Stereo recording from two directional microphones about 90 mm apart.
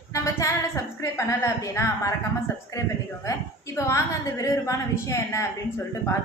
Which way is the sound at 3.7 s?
35° left (ahead or behind).